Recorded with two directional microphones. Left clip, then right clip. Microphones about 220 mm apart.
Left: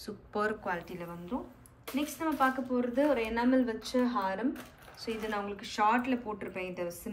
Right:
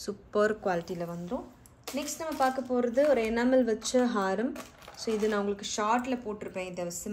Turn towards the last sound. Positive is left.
turn(degrees=-5)  # may be behind; listen again after turning